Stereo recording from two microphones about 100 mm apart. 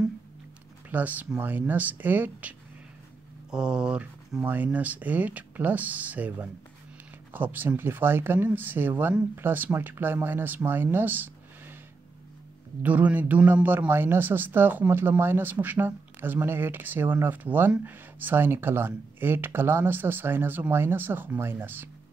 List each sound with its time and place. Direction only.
0.8 s speech: 15° right (ahead or behind)
12.8 s speech: 15° right (ahead or behind)